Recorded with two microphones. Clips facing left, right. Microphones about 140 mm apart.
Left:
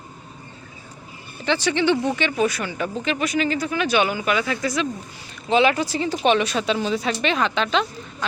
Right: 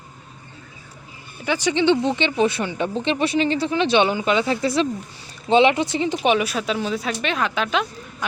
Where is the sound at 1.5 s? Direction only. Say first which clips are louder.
Right 1 dB; 15° right (ahead or behind).